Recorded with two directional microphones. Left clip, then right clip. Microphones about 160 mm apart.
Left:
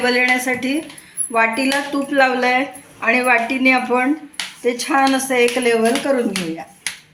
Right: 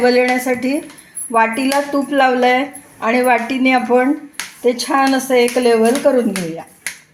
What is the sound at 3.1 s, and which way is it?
Speech, 70° right (ahead or behind).